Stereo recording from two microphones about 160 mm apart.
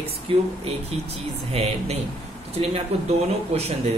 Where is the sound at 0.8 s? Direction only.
40° right (ahead or behind).